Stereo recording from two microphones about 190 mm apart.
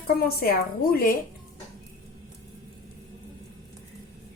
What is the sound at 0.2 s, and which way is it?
Speech, 50° left (ahead or behind).